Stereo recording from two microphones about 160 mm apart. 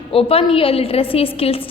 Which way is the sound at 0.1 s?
35° left (ahead or behind).